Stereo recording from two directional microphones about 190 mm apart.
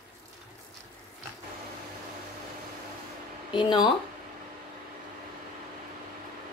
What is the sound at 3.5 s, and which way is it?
Speech, 25° left (ahead or behind).